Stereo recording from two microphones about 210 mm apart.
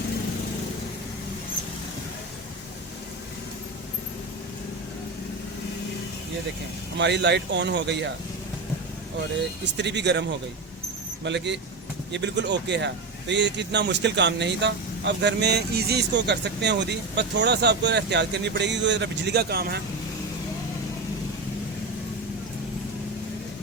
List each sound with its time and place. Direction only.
6.9 s a man's voice: 55° right (ahead or behind)
9.7 s a man's voice: 55° right (ahead or behind)